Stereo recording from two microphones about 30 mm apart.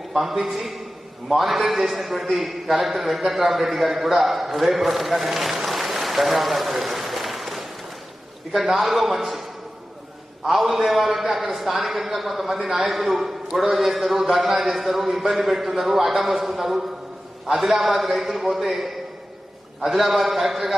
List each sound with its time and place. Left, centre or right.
0.1 s a man's voice: centre